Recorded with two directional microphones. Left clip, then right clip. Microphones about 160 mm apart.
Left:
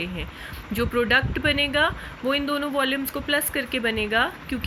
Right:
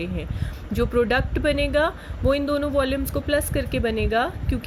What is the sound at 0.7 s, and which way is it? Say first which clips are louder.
Speech: even; 45° right (ahead or behind).